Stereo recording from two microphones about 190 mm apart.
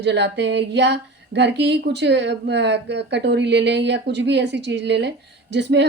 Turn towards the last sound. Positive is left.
turn(degrees=-65)  # may be behind; listen again after turning